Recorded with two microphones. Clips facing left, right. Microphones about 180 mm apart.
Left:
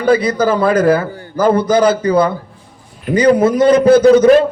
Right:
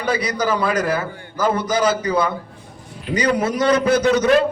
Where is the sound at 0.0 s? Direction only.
50° left (ahead or behind).